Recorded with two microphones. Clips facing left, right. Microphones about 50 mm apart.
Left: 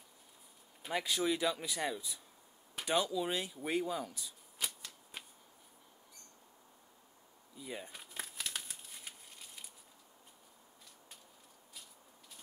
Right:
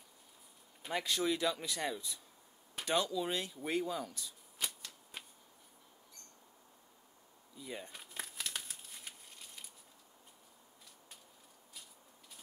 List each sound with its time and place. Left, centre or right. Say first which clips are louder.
0.8 s speech: left 1 dB; centre
7.5 s crumpling: left 1 dB; centre